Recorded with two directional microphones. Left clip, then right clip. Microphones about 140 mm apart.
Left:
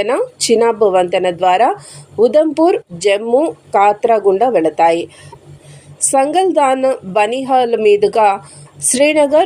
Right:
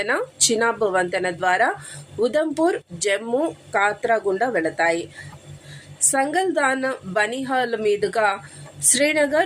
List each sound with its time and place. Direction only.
0.0 s a woman's voice: 15° left (ahead or behind)